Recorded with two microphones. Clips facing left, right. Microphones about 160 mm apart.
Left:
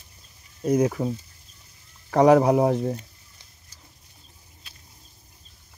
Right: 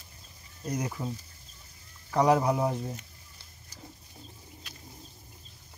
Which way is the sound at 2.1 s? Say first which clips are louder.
Left 8 dB; 65° left (ahead or behind).